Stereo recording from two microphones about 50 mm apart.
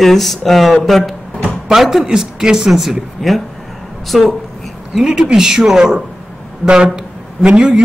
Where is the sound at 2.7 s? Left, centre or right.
Centre.